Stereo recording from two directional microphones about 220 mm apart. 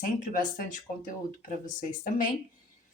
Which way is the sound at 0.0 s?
35° left (ahead or behind).